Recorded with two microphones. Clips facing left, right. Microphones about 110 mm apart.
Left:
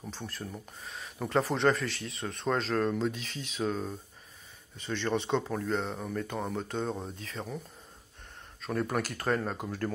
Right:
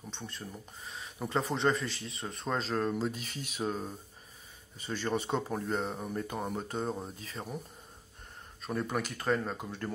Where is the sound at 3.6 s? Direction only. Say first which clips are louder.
Left 3 dB; 10° right (ahead or behind).